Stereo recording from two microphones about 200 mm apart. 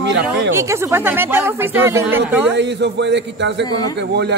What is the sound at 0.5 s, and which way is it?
Speech, 15° right (ahead or behind).